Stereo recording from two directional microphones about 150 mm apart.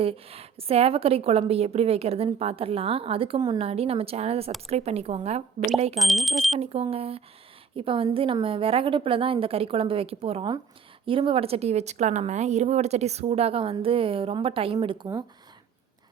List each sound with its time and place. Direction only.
0.0 s a woman's voice: 40° right (ahead or behind)
6.0 s speech: centre (ahead or behind)
6.8 s a woman's voice: 40° right (ahead or behind)